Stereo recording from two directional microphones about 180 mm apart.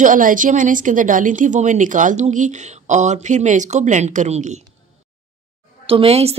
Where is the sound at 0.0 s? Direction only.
50° right (ahead or behind).